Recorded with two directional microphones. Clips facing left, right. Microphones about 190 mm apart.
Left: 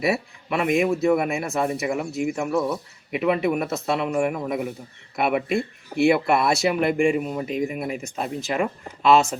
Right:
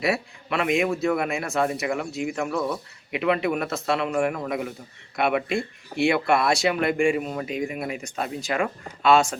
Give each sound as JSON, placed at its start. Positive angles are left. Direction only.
{"t": 0.0, "sound": "speech", "side_deg": 0}
{"t": 5.5, "sound": "speech", "side_deg": 55}
{"t": 6.1, "sound": "speech", "side_deg": 5}